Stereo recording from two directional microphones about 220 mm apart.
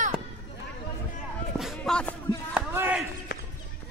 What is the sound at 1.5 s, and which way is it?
Music, centre (ahead or behind).